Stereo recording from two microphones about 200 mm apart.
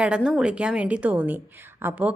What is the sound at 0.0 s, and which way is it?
A woman's voice, 5° right (ahead or behind).